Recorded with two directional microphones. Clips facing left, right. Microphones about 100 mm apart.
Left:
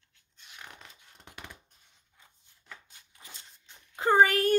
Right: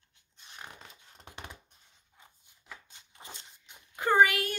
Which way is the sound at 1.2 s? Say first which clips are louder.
Right 1 dB; 25° right (ahead or behind).